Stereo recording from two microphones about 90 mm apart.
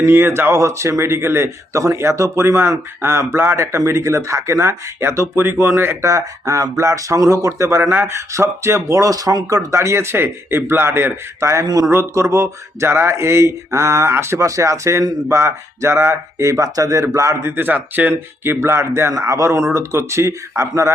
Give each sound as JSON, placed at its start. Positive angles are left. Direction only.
{"t": 0.0, "sound": "speech", "side_deg": -25}
{"t": 6.1, "sound": "speech", "side_deg": -35}
{"t": 9.6, "sound": "a man's voice", "side_deg": -30}
{"t": 11.6, "sound": "speech", "side_deg": -45}
{"t": 11.9, "sound": "speech", "side_deg": -30}
{"t": 17.6, "sound": "a man's voice", "side_deg": -20}